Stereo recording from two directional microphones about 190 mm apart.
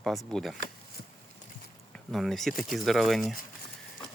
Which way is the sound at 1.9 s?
Centre (ahead or behind).